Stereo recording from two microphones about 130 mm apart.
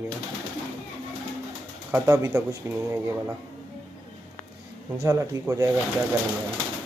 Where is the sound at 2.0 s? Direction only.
25° right (ahead or behind).